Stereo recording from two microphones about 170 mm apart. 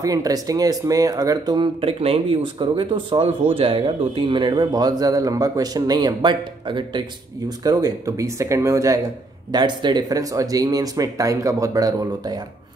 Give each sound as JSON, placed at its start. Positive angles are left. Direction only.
{"t": 0.0, "sound": "speech", "side_deg": -20}